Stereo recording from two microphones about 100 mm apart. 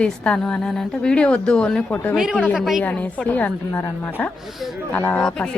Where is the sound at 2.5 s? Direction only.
Centre (ahead or behind).